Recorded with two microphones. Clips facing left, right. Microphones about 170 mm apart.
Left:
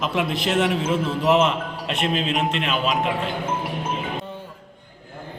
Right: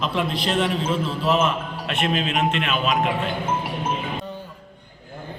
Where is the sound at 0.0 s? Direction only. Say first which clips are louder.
Left 1 dB; 15° left (ahead or behind).